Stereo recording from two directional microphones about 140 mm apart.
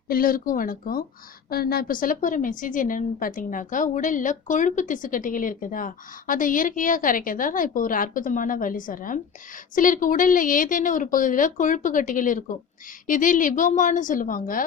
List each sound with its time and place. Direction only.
0.1 s a woman's voice: 90° left